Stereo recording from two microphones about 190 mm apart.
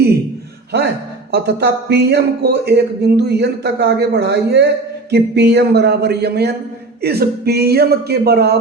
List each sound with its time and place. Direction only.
1.3 s speech: 60° right (ahead or behind)